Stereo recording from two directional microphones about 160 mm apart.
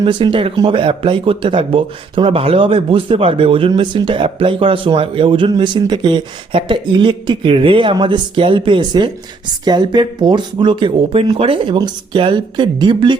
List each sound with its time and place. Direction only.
0.0 s speech: 30° right (ahead or behind)